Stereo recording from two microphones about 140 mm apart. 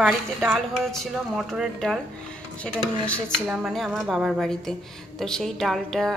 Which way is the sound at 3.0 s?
10° left (ahead or behind).